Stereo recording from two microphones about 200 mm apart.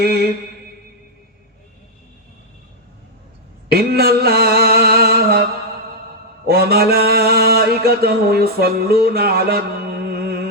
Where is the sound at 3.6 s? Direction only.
50° right (ahead or behind).